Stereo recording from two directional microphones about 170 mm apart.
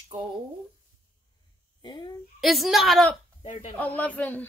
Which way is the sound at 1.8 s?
30° left (ahead or behind).